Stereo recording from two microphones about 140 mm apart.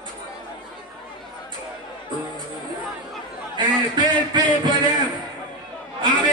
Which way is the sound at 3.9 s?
35° right (ahead or behind).